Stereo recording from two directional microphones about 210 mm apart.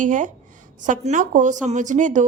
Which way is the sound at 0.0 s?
35° right (ahead or behind).